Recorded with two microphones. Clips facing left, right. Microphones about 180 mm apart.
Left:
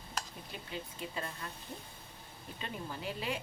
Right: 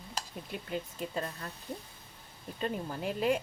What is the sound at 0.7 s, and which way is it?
Speech, 45° right (ahead or behind).